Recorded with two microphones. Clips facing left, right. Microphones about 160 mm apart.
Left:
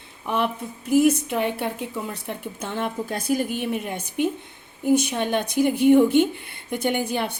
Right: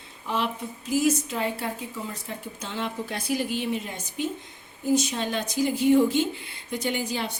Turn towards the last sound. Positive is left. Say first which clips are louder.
# left 4 dB
turn(degrees=55)  # may be behind; listen again after turning